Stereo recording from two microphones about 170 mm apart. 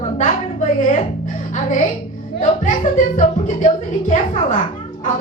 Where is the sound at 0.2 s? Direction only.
45° left (ahead or behind).